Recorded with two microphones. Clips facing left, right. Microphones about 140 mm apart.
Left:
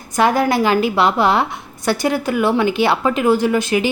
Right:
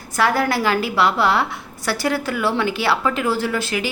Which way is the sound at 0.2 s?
20° left (ahead or behind).